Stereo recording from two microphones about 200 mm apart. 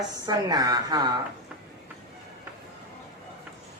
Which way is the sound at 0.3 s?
20° right (ahead or behind).